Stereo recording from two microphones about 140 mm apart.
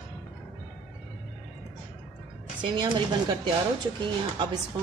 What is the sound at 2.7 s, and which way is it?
Speech, 35° right (ahead or behind).